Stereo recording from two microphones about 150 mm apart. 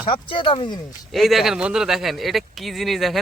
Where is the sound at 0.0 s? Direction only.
35° left (ahead or behind).